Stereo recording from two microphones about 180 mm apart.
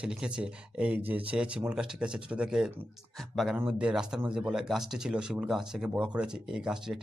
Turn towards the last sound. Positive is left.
turn(degrees=-5)  # may be behind; listen again after turning